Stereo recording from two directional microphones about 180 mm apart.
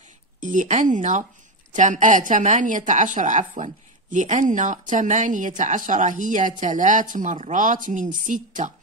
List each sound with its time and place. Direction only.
0.4 s speech: 45° right (ahead or behind)